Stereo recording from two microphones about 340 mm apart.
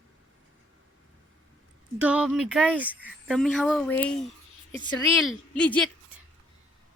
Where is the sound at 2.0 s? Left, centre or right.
Centre.